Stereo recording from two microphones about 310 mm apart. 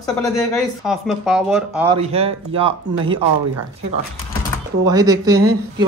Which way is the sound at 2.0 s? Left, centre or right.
Centre.